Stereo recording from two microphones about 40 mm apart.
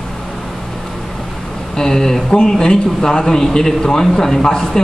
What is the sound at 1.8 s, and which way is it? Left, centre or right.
A man's voice, centre.